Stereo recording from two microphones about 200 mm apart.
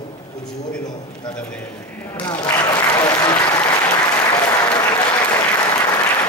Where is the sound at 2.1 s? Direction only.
20° left (ahead or behind).